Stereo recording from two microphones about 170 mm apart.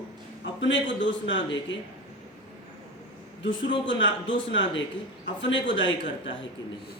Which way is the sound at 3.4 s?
90° left.